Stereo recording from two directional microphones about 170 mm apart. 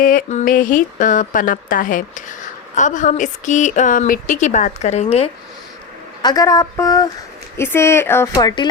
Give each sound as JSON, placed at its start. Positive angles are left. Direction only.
{"t": 0.0, "sound": "speech", "side_deg": 50}
{"t": 6.2, "sound": "speech", "side_deg": 20}
{"t": 8.4, "sound": "speech", "side_deg": 25}